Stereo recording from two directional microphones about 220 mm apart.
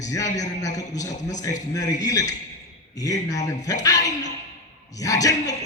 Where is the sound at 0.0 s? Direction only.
15° left (ahead or behind).